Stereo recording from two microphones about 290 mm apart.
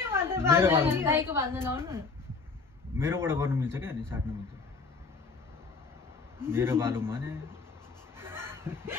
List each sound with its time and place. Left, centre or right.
0.0 s a woman's voice: centre
6.4 s a man's voice: centre
8.2 s a sound: centre